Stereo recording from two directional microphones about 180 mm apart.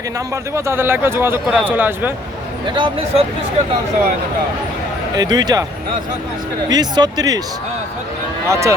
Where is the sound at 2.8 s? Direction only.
30° right (ahead or behind).